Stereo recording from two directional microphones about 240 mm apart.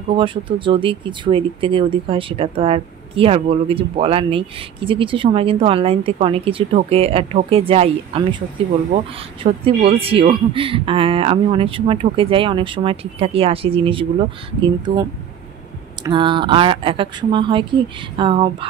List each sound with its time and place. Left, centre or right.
0.1 s speech: right